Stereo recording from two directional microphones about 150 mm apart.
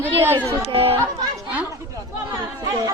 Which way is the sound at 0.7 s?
40° right (ahead or behind).